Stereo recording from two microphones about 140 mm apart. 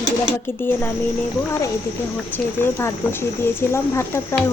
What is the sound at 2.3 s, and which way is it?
Speech, 15° left (ahead or behind).